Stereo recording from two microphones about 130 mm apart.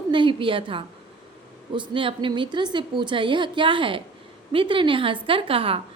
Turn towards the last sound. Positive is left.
turn(degrees=-45)  # may be behind; listen again after turning